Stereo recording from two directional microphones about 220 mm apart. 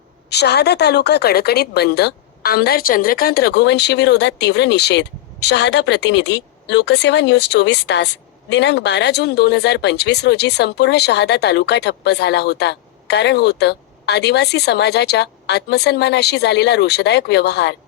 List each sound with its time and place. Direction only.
0.3 s a woman's voice: 50° left (ahead or behind)